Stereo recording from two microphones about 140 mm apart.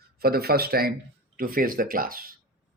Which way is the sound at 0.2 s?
90° right.